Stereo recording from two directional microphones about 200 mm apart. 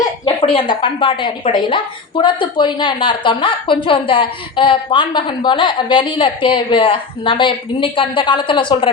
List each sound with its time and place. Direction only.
0.0 s a woman's voice: 25° left (ahead or behind)